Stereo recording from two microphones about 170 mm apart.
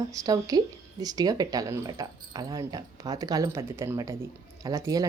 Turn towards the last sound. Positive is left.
turn(degrees=-20)  # may be behind; listen again after turning